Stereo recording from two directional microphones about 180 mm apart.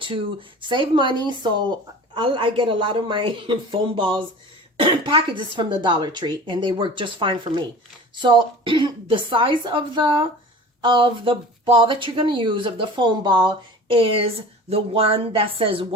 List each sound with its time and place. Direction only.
0.7 s a woman's voice: 25° right (ahead or behind)